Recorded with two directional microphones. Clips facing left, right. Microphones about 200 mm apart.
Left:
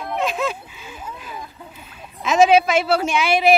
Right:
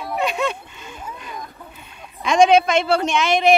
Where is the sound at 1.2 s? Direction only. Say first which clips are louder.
Even; 5° left (ahead or behind).